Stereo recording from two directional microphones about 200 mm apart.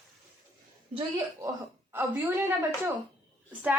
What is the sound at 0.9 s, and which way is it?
Speech, 30° right (ahead or behind).